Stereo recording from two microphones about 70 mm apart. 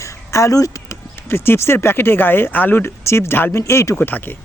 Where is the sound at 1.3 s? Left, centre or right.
Left.